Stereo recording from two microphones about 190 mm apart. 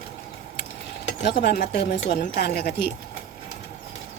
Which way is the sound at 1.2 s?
60° left (ahead or behind).